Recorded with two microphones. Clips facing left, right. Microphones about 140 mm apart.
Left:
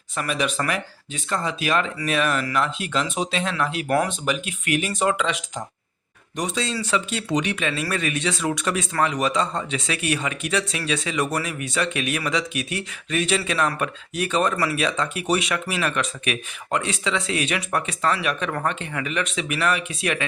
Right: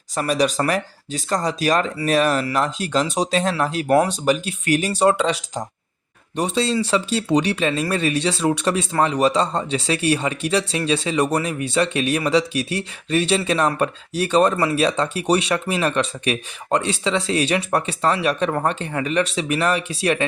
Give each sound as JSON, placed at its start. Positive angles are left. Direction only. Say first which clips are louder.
{"t": 0.2, "sound": "speech", "louder": "right 5 dB", "side_deg": -35}